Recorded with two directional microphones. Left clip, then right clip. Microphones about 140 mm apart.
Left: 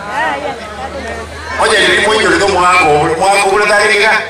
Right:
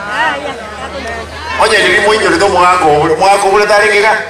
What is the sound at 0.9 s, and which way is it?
A man's voice, 30° right (ahead or behind).